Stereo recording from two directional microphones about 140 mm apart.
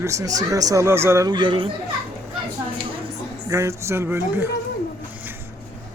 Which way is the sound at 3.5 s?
20° right (ahead or behind).